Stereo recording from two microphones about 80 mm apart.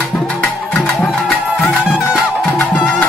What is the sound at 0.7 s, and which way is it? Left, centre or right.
Music, centre.